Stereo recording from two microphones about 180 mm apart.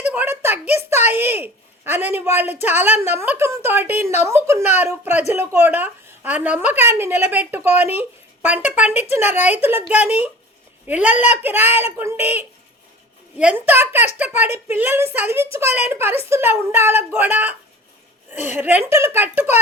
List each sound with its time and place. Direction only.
0.0 s speech: 10° right (ahead or behind)